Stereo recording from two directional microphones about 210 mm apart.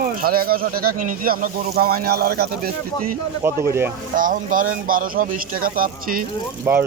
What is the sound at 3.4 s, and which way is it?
Speech, 10° right (ahead or behind).